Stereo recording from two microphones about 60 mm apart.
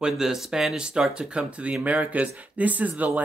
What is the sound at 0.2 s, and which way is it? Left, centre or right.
Speech, centre.